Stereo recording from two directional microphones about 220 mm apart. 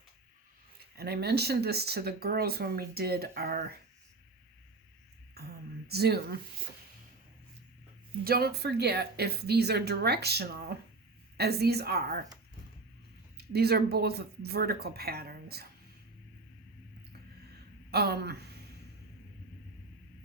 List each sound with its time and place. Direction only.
0.9 s speech: 45° right (ahead or behind)
5.3 s a sound: 45° right (ahead or behind)
8.2 s speech: 45° right (ahead or behind)
13.3 s speech: 45° right (ahead or behind)
17.9 s speech: 45° right (ahead or behind)